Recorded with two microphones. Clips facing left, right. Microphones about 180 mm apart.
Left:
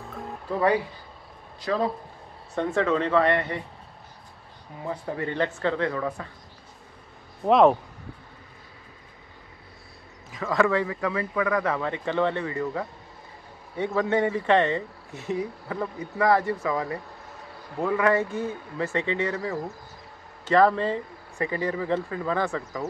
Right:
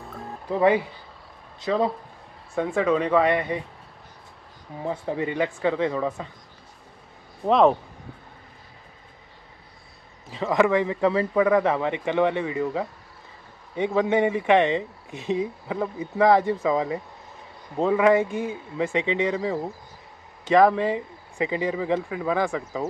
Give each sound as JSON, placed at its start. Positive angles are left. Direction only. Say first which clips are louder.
{"t": 0.5, "sound": "speech", "louder": "right 3 dB", "side_deg": -20}
{"t": 2.5, "sound": "speech", "louder": "right 2 dB", "side_deg": -10}
{"t": 4.8, "sound": "speech", "louder": "right 3 dB", "side_deg": -15}
{"t": 7.4, "sound": "speech", "louder": "even", "side_deg": 0}
{"t": 10.3, "sound": "speech", "louder": "right 3 dB", "side_deg": -20}